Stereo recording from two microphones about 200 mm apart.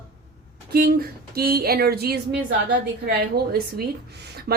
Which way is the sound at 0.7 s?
50° right (ahead or behind).